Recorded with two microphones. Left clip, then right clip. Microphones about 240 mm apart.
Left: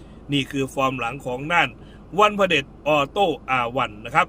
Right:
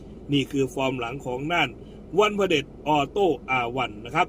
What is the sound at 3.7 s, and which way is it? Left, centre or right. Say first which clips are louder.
Speech: left 5 dB; centre.